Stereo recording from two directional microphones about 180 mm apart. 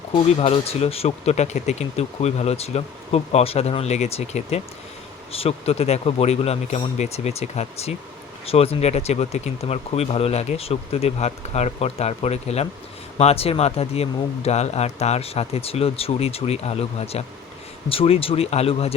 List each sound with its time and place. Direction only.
0.3 s speech: 35° left (ahead or behind)